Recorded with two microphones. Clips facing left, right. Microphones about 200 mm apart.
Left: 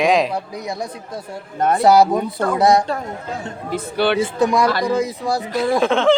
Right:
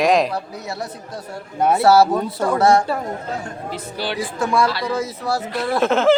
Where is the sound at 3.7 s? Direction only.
60° left (ahead or behind).